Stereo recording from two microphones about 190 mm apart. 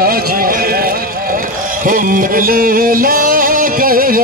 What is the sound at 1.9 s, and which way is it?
Music, 45° right (ahead or behind).